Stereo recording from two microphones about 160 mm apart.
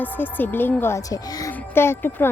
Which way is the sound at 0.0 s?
10° left (ahead or behind).